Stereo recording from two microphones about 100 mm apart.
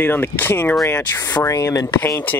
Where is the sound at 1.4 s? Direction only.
30° left (ahead or behind).